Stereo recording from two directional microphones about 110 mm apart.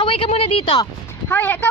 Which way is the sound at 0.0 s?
55° left (ahead or behind).